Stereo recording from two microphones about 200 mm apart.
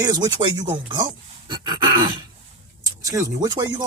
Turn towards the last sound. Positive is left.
turn(degrees=-15)  # may be behind; listen again after turning